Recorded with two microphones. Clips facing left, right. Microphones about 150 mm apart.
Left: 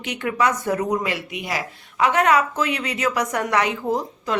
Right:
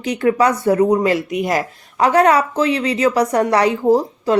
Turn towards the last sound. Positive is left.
turn(degrees=-35)  # may be behind; listen again after turning